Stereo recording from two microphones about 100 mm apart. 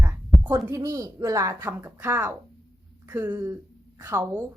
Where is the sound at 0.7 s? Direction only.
35° right (ahead or behind).